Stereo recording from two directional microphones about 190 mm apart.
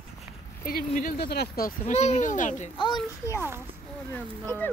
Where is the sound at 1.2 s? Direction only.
60° left (ahead or behind); by 2.7 s 40° left (ahead or behind).